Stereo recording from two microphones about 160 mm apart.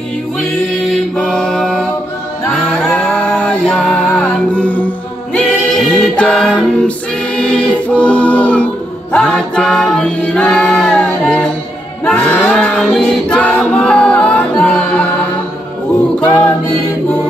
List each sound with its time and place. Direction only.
0.4 s music: centre (ahead or behind)
2.9 s music: 5° left (ahead or behind)
7.3 s choir: 5° left (ahead or behind)
9.1 s music: 5° left (ahead or behind)
12.0 s choir: 5° left (ahead or behind)